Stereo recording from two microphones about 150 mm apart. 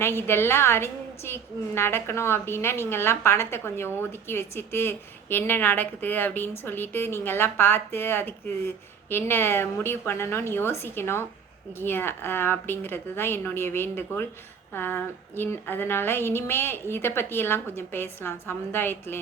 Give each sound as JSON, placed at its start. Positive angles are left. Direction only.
{"t": 0.2, "sound": "a woman's voice", "side_deg": 15}